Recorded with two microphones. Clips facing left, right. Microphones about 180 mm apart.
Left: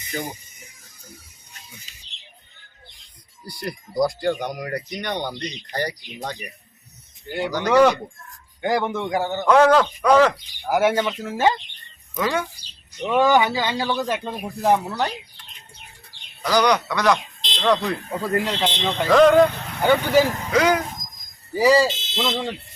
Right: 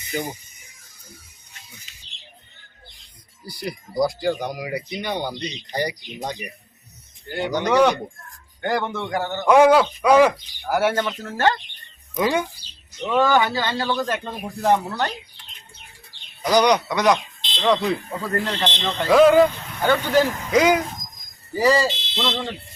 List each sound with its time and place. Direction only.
3.4 s speech: centre (ahead or behind)
7.3 s speech: 5° left (ahead or behind)
9.5 s speech: 10° right (ahead or behind)
10.6 s speech: 10° left (ahead or behind)
12.1 s speech: 15° right (ahead or behind)
13.0 s speech: 15° left (ahead or behind)
16.4 s speech: 15° right (ahead or behind)
17.6 s speech: 5° right (ahead or behind)
18.1 s speech: 10° left (ahead or behind)
19.0 s speech: 5° right (ahead or behind)
19.8 s speech: 15° left (ahead or behind)
20.5 s speech: 10° right (ahead or behind)
21.5 s speech: 10° left (ahead or behind)